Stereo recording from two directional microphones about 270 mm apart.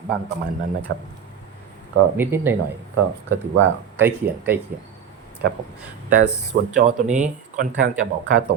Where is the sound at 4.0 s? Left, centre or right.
Centre.